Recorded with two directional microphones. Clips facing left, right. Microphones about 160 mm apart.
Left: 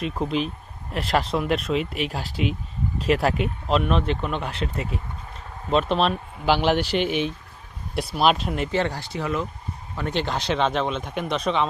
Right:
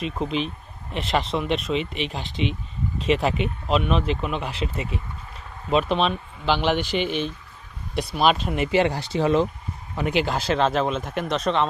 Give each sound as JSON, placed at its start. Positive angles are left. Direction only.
{"t": 0.0, "sound": "speech", "side_deg": 0}
{"t": 9.1, "sound": "speech", "side_deg": -30}
{"t": 9.9, "sound": "speech", "side_deg": -15}